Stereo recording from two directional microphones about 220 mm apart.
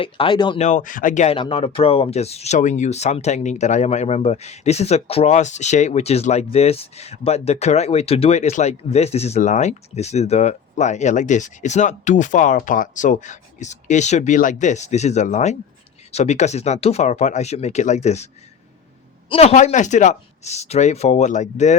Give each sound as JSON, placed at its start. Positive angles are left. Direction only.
{"t": 0.0, "sound": "speech", "side_deg": 20}
{"t": 19.3, "sound": "speech", "side_deg": 30}